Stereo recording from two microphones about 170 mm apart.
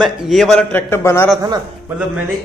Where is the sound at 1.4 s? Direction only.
25° right (ahead or behind).